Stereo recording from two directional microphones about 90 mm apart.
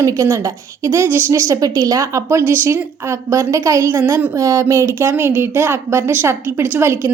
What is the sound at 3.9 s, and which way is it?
Speech, 20° right (ahead or behind).